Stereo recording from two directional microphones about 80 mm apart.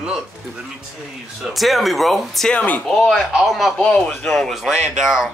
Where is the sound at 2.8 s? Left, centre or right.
Centre.